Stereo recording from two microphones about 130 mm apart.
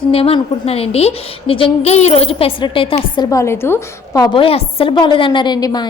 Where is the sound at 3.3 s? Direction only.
20° left (ahead or behind).